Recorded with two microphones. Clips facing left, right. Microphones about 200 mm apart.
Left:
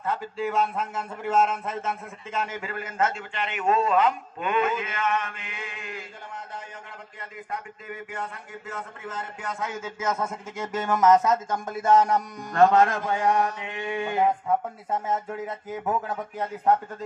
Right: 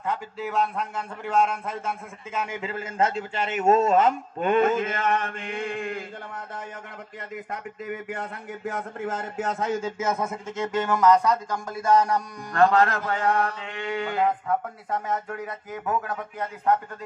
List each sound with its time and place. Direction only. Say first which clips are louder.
0.0 s a man's voice: left 1 dB; 15° right (ahead or behind)
0.5 s a man's voice: right 1 dB; centre (ahead or behind)
2.4 s a man's voice: right 1 dB; 15° right (ahead or behind)
2.7 s a man's voice: right 3 dB; 30° right (ahead or behind); by 6.6 s 50° right (ahead or behind)
7.9 s a man's voice: right 1 dB; 60° right (ahead or behind); by 10.1 s 25° right (ahead or behind)
10.1 s a man's voice: right 1 dB; 5° right (ahead or behind)
10.9 s speech: left 1 dB; 20° left (ahead or behind)